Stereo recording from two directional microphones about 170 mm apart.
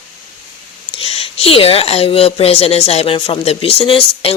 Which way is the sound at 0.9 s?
35° left (ahead or behind).